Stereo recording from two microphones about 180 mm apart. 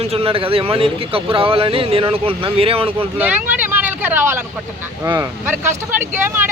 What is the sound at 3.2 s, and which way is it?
Speech, 10° right (ahead or behind).